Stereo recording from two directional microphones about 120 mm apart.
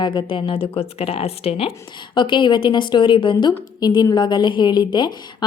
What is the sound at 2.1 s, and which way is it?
A woman's voice, 40° left (ahead or behind).